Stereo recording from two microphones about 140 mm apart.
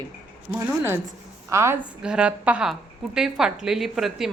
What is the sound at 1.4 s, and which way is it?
Speech, 20° right (ahead or behind).